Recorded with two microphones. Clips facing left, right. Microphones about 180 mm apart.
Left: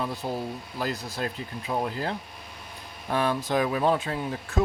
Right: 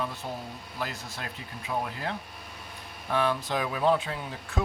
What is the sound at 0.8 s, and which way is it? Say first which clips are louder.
Speech: left 6 dB; 35° left (ahead or behind).